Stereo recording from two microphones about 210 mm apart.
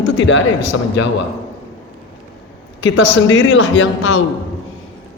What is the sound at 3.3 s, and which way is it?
Speech, 60° left (ahead or behind).